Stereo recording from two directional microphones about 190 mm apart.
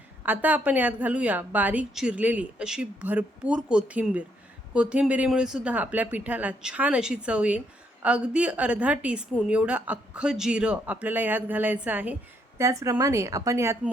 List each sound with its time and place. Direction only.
0.2 s a woman's voice: 10° right (ahead or behind)